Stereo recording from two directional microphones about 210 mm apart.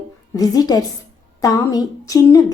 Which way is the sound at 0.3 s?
15° left (ahead or behind).